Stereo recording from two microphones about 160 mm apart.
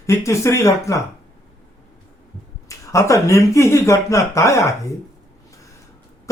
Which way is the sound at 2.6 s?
20° left (ahead or behind).